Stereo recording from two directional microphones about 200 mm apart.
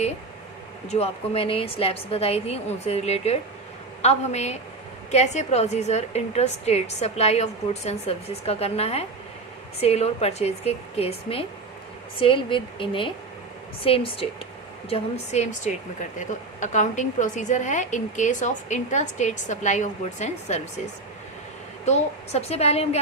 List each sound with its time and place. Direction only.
0.9 s a woman's voice: 30° left (ahead or behind)
21.8 s a woman's voice: 35° left (ahead or behind)